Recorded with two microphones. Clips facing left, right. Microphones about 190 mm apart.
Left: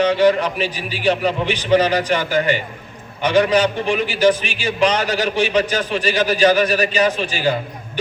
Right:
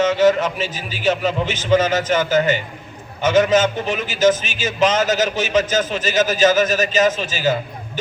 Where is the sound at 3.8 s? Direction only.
45° right (ahead or behind).